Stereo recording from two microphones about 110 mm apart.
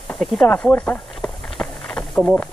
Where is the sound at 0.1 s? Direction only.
10° left (ahead or behind).